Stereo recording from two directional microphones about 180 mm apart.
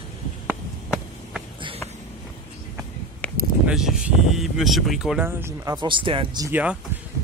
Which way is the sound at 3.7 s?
Centre (ahead or behind).